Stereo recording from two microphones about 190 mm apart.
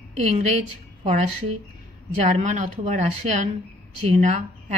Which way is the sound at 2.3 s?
40° right (ahead or behind).